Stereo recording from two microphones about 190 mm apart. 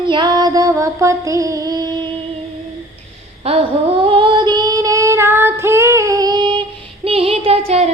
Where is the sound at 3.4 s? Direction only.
30° right (ahead or behind).